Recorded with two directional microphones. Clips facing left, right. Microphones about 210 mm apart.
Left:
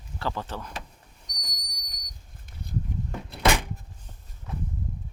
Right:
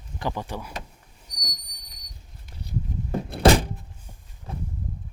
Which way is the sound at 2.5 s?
50° left (ahead or behind).